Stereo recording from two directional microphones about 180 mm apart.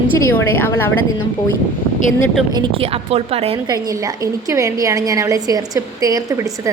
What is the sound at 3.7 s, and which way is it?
A woman's voice, 20° right (ahead or behind).